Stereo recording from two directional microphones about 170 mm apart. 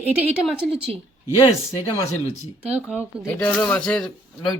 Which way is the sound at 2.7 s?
5° right (ahead or behind).